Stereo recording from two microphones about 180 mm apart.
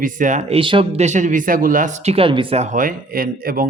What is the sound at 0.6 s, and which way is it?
Speech, 30° right (ahead or behind).